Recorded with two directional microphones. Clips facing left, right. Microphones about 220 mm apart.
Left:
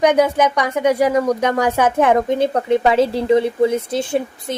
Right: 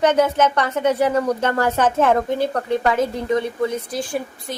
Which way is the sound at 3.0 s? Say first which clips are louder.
Left 5 dB; 30° left (ahead or behind).